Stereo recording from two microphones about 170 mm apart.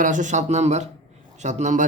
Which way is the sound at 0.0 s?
50° right (ahead or behind).